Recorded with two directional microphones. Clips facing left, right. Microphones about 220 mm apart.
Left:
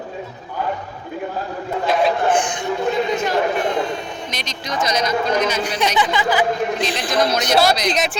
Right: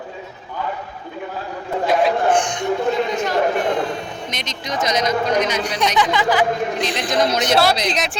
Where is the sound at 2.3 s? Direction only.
5° left (ahead or behind).